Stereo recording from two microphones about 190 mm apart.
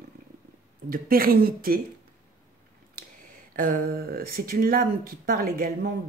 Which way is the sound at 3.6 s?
45° right (ahead or behind).